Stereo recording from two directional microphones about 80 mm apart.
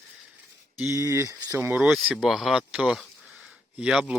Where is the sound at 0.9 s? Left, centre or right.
Right.